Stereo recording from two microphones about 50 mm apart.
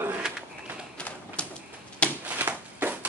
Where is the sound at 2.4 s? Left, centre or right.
Right.